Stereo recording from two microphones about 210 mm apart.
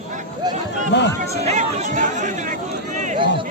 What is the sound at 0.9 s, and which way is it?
Speech, 55° left (ahead or behind).